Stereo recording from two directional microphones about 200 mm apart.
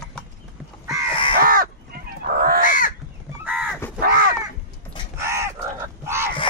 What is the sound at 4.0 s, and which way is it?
Crow, 45° right (ahead or behind).